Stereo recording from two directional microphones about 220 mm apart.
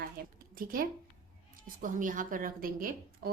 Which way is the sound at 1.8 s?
35° right (ahead or behind).